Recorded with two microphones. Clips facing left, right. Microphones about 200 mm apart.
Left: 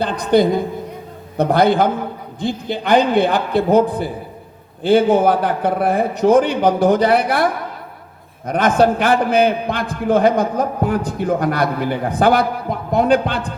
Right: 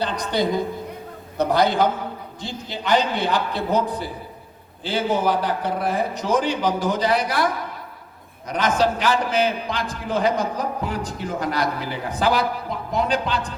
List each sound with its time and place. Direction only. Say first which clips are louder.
0.0 s a woman's voice: left 8 dB; 55° left (ahead or behind)